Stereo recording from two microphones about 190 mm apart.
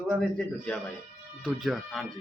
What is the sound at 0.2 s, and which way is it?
Speech, 5° left (ahead or behind).